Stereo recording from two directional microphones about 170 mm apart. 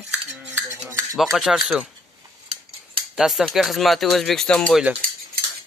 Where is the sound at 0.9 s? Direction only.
20° right (ahead or behind).